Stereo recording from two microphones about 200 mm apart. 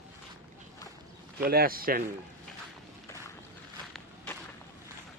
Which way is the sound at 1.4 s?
45° right (ahead or behind).